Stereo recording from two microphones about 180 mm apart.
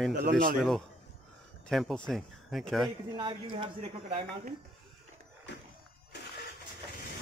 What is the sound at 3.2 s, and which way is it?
Speech, 25° right (ahead or behind).